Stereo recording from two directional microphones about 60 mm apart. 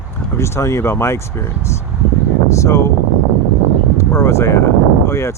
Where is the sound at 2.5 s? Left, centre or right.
Left.